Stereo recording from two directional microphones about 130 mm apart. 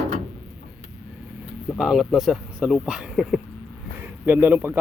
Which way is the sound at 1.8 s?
Centre (ahead or behind).